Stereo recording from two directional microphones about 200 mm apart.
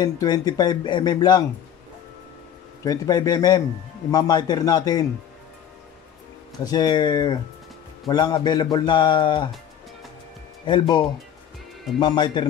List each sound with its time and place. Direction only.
0.0 s speech: 20° left (ahead or behind)
2.8 s speech: 20° left (ahead or behind)
6.6 s speech: 20° left (ahead or behind)
10.6 s speech: 25° left (ahead or behind)